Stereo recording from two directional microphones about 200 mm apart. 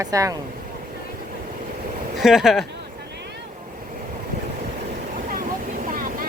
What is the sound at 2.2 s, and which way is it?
Speech, centre (ahead or behind).